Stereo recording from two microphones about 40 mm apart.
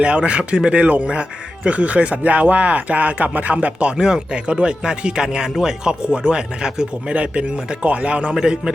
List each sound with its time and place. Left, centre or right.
0.0 s speech: right
3.9 s speech: centre
7.1 s speech: right